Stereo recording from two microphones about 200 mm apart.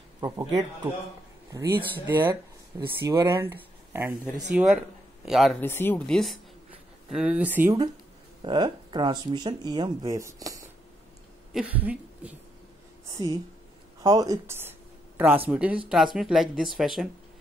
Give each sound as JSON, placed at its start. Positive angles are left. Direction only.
{"t": 0.2, "sound": "speech", "side_deg": -15}
{"t": 4.4, "sound": "speech", "side_deg": 0}
{"t": 5.6, "sound": "speech", "side_deg": 10}
{"t": 8.4, "sound": "speech", "side_deg": -25}
{"t": 11.5, "sound": "a sound", "side_deg": -5}
{"t": 13.1, "sound": "speech", "side_deg": -20}